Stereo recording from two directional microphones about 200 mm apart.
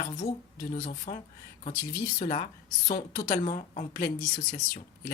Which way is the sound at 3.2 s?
40° left (ahead or behind).